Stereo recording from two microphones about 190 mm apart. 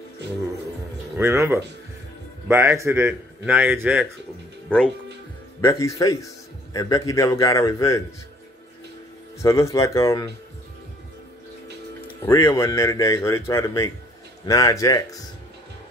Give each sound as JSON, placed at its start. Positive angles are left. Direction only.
{"t": 1.1, "sound": "a man's voice", "side_deg": -15}
{"t": 4.6, "sound": "speech", "side_deg": 5}
{"t": 5.6, "sound": "a man's voice", "side_deg": 15}
{"t": 9.4, "sound": "a man's voice", "side_deg": 15}
{"t": 12.2, "sound": "a man's voice", "side_deg": 15}